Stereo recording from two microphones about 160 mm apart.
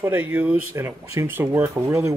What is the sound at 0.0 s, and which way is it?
Speech, 10° right (ahead or behind).